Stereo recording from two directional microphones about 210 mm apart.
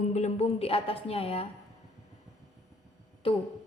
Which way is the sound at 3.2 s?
25° left (ahead or behind).